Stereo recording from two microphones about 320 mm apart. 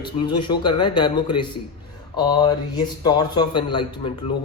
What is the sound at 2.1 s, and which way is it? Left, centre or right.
Speech, centre.